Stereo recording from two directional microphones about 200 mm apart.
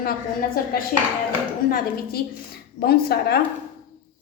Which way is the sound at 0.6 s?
45° left (ahead or behind).